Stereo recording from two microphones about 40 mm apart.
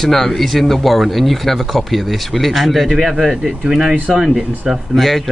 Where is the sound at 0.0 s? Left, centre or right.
Centre.